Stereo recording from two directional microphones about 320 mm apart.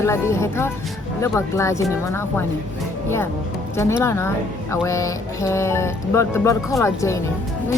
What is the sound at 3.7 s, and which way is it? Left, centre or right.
Speech, centre.